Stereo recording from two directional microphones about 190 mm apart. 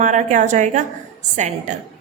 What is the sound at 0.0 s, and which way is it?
A woman's voice, 40° right (ahead or behind).